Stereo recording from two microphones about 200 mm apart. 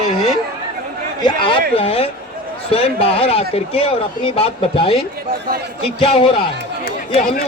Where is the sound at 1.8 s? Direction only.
30° left (ahead or behind).